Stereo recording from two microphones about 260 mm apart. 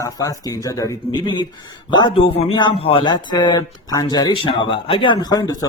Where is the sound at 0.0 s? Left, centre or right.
Centre.